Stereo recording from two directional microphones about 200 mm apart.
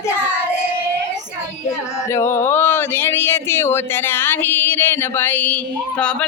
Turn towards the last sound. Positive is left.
turn(degrees=5)  # may be behind; listen again after turning